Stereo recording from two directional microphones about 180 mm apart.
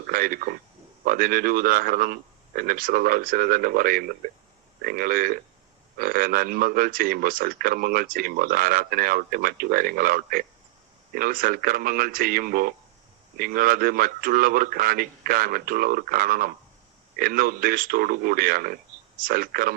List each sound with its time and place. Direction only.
0.1 s speech: 50° right (ahead or behind)